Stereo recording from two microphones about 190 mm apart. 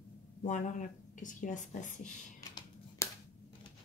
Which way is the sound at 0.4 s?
40° left (ahead or behind).